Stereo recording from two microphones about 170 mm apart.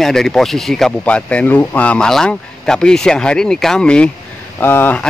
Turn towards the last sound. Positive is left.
turn(degrees=10)  # may be behind; listen again after turning